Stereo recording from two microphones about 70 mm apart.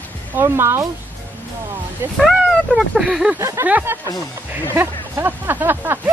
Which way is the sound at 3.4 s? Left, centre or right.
Right.